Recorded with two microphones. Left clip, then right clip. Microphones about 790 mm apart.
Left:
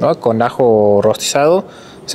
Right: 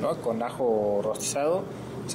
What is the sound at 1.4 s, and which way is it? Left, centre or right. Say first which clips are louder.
Speech: left 14 dB; left.